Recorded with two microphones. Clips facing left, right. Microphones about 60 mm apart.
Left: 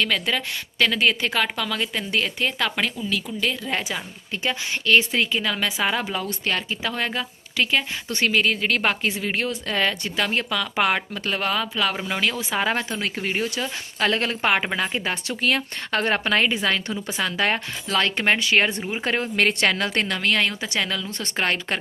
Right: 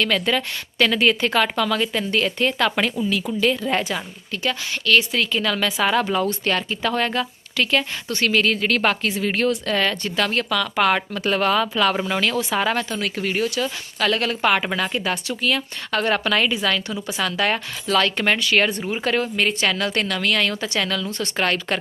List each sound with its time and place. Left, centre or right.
0.0 s a woman's voice: centre
4.3 s a woman's voice: left
11.2 s a woman's voice: centre; by 15.4 s left
15.4 s speech: left
18.8 s a woman's voice: centre
19.0 s speech: left
19.4 s a woman's voice: left
19.7 s speech: left
20.5 s a woman's voice: centre
21.1 s speech: left